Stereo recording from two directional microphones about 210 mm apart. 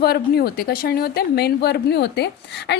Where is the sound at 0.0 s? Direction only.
50° left (ahead or behind).